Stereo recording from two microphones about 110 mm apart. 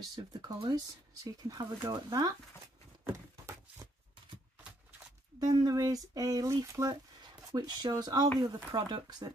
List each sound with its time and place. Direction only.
0.1 s speech: 40° right (ahead or behind)
3.1 s a sound: 30° right (ahead or behind)
5.4 s speech: 35° right (ahead or behind)